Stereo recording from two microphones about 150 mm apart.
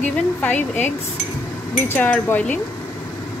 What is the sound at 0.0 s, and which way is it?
A woman's voice, 10° left (ahead or behind).